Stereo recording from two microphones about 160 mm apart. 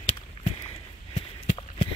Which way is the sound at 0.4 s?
35° left (ahead or behind).